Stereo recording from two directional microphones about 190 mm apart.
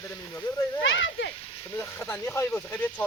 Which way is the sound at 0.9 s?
80° left.